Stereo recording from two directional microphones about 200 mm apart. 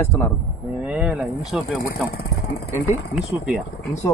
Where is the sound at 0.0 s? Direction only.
10° left (ahead or behind).